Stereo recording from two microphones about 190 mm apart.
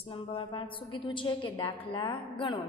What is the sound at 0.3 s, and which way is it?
A woman's voice, 25° left (ahead or behind).